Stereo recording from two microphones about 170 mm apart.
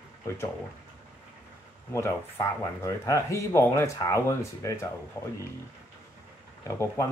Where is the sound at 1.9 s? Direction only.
15° left (ahead or behind).